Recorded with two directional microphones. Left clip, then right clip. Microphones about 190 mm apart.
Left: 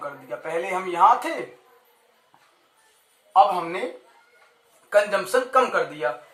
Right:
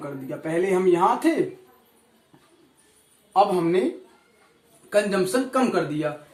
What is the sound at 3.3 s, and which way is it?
Speech, 10° left (ahead or behind).